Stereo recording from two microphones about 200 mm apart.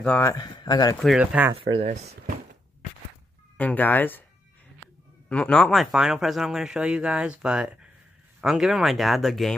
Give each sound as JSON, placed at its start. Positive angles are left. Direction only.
{"t": 0.0, "sound": "speech", "side_deg": 10}
{"t": 1.0, "sound": "speech", "side_deg": -5}
{"t": 1.5, "sound": "speech", "side_deg": -25}
{"t": 3.5, "sound": "speech", "side_deg": 10}
{"t": 5.3, "sound": "speech", "side_deg": 5}